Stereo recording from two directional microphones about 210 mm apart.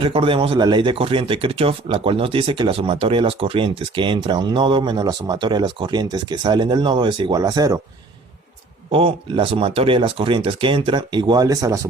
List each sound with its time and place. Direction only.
0.0 s speech: 25° right (ahead or behind)
8.9 s speech: 25° right (ahead or behind)